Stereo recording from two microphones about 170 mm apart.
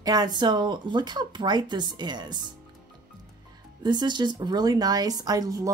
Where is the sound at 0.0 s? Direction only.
20° right (ahead or behind).